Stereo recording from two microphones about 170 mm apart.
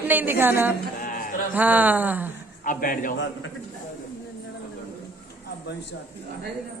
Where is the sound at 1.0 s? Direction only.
55° left (ahead or behind).